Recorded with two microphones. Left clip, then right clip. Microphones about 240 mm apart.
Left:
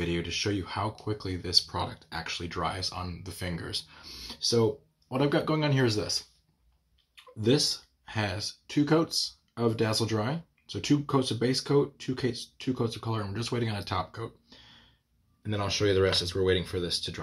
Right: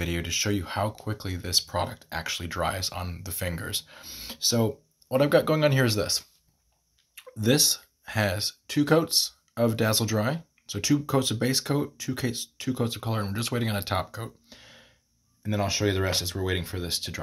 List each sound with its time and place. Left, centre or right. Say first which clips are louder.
0.0 s speech: right 2 dB; right